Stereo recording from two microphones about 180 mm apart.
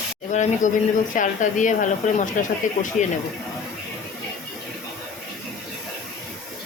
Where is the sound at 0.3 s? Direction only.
45° left (ahead or behind).